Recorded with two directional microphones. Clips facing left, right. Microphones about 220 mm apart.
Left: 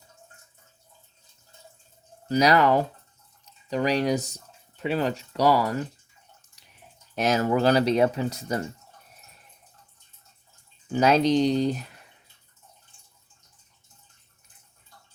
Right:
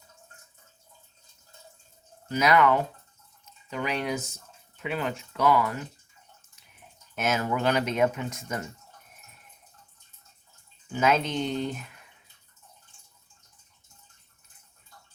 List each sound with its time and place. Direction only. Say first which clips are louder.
2.3 s speech: left 2 dB; 35° left (ahead or behind)
7.2 s speech: left 5 dB; 35° left (ahead or behind)
10.9 s speech: left 6 dB; 35° left (ahead or behind)